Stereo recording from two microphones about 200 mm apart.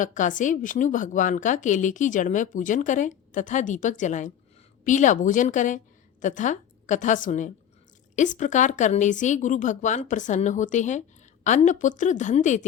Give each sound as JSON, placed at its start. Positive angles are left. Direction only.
{"t": 0.0, "sound": "a woman's voice", "side_deg": 40}